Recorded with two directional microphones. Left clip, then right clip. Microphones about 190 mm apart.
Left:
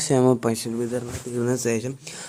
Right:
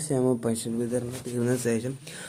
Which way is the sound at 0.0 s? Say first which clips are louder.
Left 6 dB; 50° left (ahead or behind).